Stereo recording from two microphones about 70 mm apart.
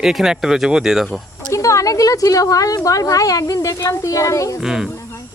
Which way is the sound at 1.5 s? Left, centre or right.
Left.